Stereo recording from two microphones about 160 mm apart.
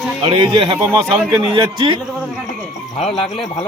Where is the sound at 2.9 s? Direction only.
35° left (ahead or behind).